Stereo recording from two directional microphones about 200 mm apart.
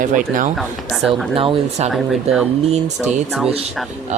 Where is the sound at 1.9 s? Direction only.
Centre (ahead or behind).